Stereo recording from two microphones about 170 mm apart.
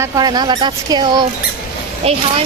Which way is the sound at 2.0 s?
35° right (ahead or behind).